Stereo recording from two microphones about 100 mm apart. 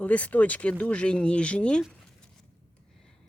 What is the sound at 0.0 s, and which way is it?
Speech, 15° left (ahead or behind).